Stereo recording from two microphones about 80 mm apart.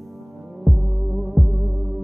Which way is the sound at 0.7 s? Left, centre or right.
Centre.